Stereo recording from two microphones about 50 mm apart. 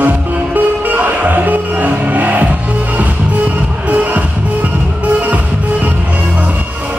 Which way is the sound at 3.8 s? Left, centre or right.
Right.